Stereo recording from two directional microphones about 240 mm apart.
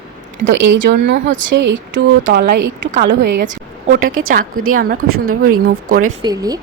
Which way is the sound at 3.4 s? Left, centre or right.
Right.